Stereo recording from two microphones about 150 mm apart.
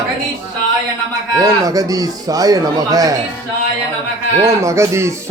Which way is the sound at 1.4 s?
25° right (ahead or behind).